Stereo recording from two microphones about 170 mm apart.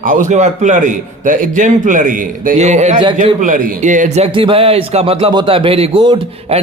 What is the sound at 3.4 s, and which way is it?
Speech, 50° right (ahead or behind).